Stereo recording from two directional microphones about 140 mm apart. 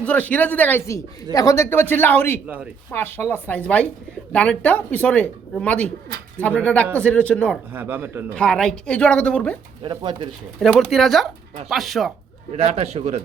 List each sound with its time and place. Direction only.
0.0 s speech: 10° left (ahead or behind)
7.7 s speech: 15° right (ahead or behind)
8.4 s speech: 5° left (ahead or behind)
9.8 s speech: 35° right (ahead or behind)
10.6 s speech: centre (ahead or behind)
12.5 s a man's voice: 45° right (ahead or behind)